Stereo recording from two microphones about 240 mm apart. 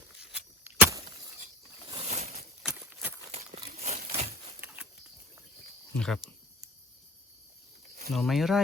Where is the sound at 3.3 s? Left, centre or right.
Right.